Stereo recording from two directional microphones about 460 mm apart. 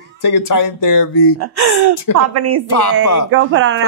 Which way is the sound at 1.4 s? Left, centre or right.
Right.